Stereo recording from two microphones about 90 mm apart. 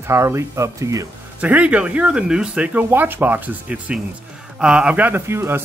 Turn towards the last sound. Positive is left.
turn(degrees=-30)  # may be behind; listen again after turning